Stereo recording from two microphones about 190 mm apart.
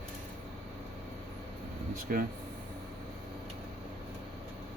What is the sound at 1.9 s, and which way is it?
Speech, 50° right (ahead or behind).